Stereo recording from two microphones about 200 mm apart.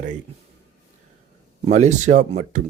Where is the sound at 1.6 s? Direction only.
35° right (ahead or behind).